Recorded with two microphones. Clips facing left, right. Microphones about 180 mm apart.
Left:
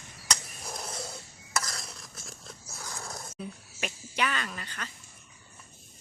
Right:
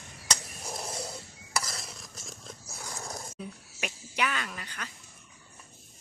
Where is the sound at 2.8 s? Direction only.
20° right (ahead or behind).